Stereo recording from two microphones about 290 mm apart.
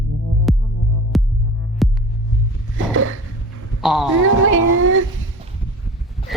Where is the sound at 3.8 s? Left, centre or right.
Centre.